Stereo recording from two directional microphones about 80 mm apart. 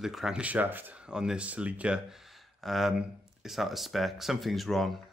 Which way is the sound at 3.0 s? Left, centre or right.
Centre.